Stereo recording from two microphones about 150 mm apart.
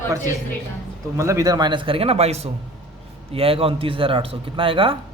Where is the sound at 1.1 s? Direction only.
20° right (ahead or behind); by 5.0 s 35° right (ahead or behind).